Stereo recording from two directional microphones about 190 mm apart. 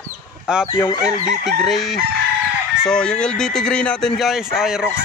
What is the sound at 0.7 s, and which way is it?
Speech, 20° left (ahead or behind).